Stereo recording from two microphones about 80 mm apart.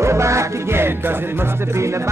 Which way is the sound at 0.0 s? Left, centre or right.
Right.